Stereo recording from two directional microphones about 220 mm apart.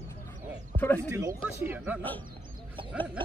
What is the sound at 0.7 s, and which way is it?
Speech, 10° left (ahead or behind).